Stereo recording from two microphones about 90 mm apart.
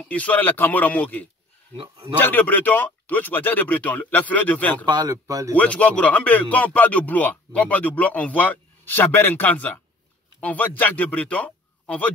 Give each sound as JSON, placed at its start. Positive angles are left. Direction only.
{"t": 0.0, "sound": "speech", "side_deg": 15}
{"t": 1.8, "sound": "a man's voice", "side_deg": -90}
{"t": 2.1, "sound": "speech", "side_deg": 20}
{"t": 4.8, "sound": "speech", "side_deg": -55}
{"t": 5.1, "sound": "speech", "side_deg": -35}
{"t": 5.5, "sound": "a man's voice", "side_deg": 15}